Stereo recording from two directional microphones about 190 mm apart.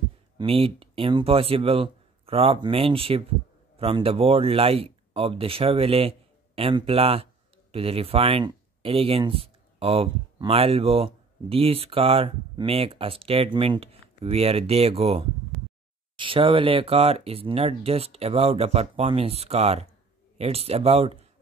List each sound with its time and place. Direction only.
0.4 s speech: 30° right (ahead or behind)